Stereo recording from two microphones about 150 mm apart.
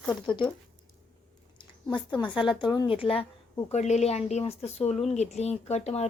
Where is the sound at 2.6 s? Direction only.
30° left (ahead or behind).